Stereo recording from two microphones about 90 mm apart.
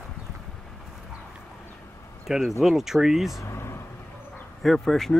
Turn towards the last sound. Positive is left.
turn(degrees=5)  # may be behind; listen again after turning